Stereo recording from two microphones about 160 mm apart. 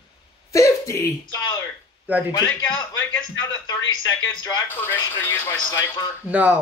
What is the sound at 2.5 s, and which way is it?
Speech, 5° left (ahead or behind).